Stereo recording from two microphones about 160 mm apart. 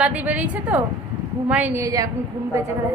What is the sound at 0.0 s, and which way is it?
A woman's voice, 10° right (ahead or behind).